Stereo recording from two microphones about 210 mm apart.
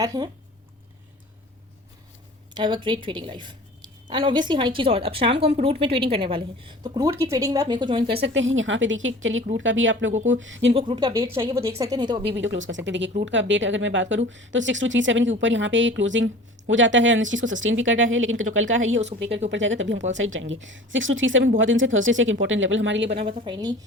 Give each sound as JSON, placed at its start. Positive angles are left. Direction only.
{"t": 0.0, "sound": "speech", "side_deg": -15}
{"t": 2.6, "sound": "a woman's voice", "side_deg": -20}
{"t": 8.2, "sound": "speech", "side_deg": -60}
{"t": 10.7, "sound": "speech", "side_deg": -25}
{"t": 12.2, "sound": "speech", "side_deg": -60}
{"t": 23.1, "sound": "a woman's voice", "side_deg": -25}